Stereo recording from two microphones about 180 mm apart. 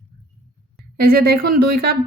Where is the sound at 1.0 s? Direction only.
55° right (ahead or behind).